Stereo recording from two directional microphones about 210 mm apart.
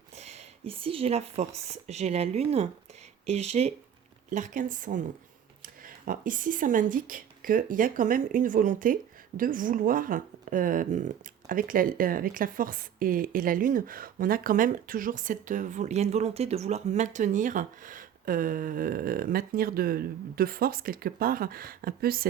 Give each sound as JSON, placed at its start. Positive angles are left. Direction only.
{"t": 0.2, "sound": "speech", "side_deg": -30}